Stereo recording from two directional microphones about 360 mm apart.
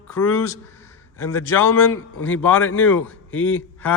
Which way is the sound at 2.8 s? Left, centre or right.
Centre.